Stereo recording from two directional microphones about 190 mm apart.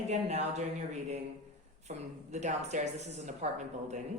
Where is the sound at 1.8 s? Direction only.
35° right (ahead or behind).